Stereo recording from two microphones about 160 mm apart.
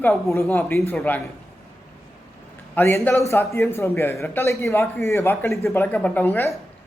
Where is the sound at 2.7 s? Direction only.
10° left (ahead or behind).